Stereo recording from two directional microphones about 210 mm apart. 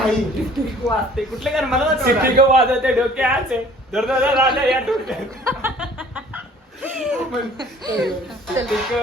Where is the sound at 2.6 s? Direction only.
10° right (ahead or behind).